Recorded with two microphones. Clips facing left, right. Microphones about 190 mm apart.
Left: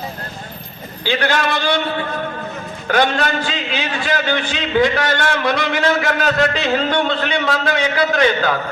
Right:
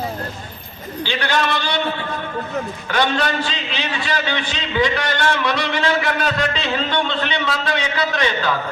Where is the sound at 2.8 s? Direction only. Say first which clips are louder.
Left 4 dB; 45° left (ahead or behind).